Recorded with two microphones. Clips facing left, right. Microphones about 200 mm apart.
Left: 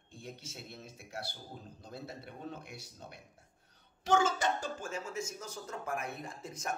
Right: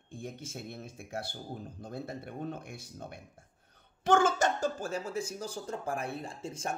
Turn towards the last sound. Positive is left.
turn(degrees=-30)  # may be behind; listen again after turning